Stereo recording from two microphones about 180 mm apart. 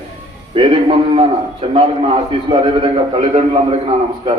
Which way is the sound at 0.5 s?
30° right (ahead or behind).